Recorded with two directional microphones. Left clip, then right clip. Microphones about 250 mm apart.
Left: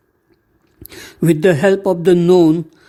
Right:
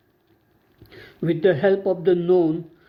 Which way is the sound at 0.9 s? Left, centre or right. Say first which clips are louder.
Left 9 dB; left.